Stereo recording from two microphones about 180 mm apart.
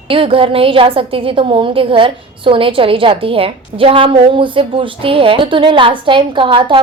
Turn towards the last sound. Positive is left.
turn(degrees=-30)  # may be behind; listen again after turning